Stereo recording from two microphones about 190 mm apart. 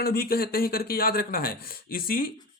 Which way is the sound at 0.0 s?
50° left (ahead or behind).